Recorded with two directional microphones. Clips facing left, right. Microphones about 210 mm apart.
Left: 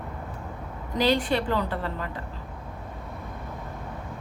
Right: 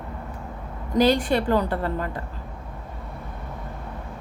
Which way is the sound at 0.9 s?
45° right (ahead or behind).